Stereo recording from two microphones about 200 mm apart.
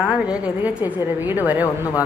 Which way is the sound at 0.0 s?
5° right (ahead or behind).